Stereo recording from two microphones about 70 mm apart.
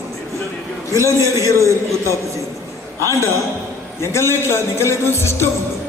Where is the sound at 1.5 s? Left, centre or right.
Right.